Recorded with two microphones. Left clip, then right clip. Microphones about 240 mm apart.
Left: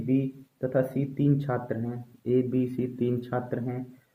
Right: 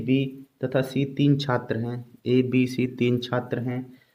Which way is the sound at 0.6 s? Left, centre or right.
Right.